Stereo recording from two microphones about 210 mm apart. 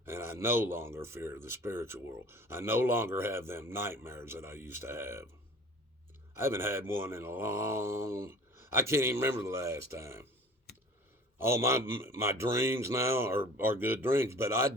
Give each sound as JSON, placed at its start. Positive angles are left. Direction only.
{"t": 0.0, "sound": "speech", "side_deg": -10}
{"t": 6.3, "sound": "speech", "side_deg": -10}
{"t": 11.3, "sound": "speech", "side_deg": -10}